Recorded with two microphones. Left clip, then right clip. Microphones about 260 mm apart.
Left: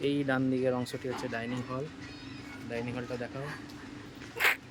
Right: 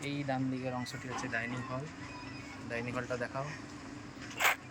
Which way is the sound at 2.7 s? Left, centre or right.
Centre.